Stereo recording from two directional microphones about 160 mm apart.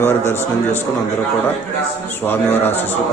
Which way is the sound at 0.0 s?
15° left (ahead or behind).